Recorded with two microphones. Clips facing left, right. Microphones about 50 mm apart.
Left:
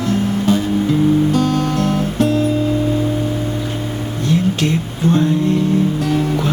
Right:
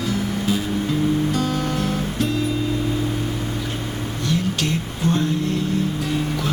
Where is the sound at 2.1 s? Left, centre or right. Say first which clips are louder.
Left 9 dB; left.